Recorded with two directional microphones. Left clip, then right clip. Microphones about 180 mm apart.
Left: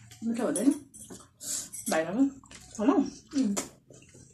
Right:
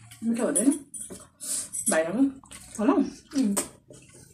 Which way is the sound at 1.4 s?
15° left (ahead or behind).